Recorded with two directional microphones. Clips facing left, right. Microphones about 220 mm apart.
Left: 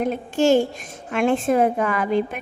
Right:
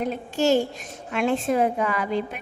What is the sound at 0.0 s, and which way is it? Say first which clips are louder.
A woman's voice: left 4 dB; 50° left (ahead or behind).